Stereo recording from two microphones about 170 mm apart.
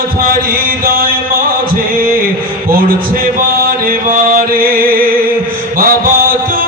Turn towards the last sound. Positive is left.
turn(degrees=-60)  # may be behind; listen again after turning